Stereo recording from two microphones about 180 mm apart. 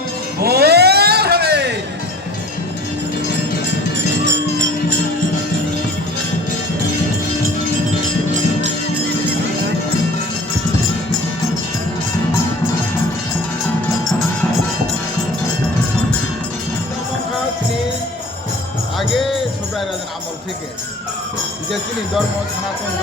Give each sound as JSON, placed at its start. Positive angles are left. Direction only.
{"t": 0.3, "sound": "music", "side_deg": -60}
{"t": 3.9, "sound": "music", "side_deg": -85}